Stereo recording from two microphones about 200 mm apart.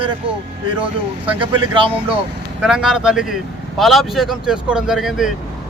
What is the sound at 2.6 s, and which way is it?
A man's voice, 5° right (ahead or behind).